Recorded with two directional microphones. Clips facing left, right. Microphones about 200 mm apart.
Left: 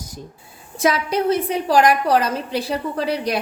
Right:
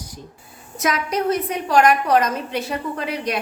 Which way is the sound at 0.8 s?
30° left (ahead or behind).